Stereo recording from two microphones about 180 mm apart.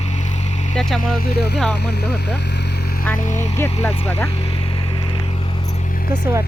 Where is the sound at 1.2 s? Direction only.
60° left (ahead or behind).